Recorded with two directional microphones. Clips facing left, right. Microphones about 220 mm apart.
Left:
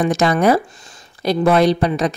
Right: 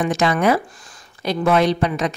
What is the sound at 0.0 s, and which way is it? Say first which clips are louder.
A woman's voice: left 3 dB; 40° left (ahead or behind).